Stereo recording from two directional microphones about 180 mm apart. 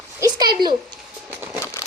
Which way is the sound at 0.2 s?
20° right (ahead or behind).